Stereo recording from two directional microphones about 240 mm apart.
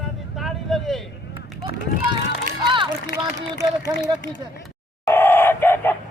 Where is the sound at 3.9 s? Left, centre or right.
Centre.